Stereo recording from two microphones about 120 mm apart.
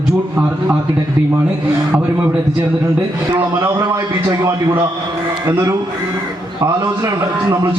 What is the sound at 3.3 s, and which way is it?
A man's voice, 20° right (ahead or behind).